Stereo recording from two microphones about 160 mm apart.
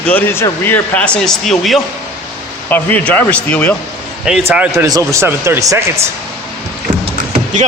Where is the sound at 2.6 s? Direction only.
10° left (ahead or behind).